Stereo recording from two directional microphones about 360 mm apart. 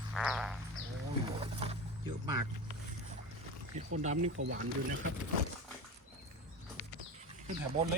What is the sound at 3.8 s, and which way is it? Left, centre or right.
Speech, centre.